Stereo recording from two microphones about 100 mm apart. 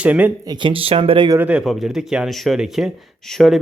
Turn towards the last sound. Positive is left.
turn(degrees=0)  # may be behind; listen again after turning